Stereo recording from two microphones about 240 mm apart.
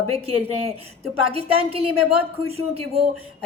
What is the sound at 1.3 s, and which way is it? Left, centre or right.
A woman's voice, right.